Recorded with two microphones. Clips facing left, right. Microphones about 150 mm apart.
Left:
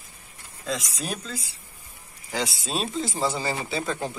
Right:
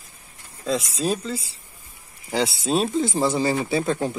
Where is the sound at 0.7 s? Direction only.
30° right (ahead or behind).